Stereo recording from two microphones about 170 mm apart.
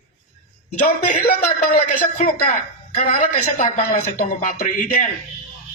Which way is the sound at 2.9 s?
45° left (ahead or behind).